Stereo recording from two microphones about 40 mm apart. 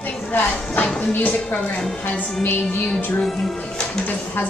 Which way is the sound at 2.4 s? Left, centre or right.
Left.